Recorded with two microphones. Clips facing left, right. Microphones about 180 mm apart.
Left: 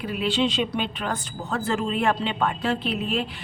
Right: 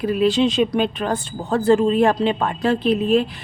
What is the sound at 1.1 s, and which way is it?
A woman's voice, 30° right (ahead or behind).